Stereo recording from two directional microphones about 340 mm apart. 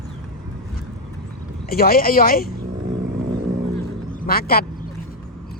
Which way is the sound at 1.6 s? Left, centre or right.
Left.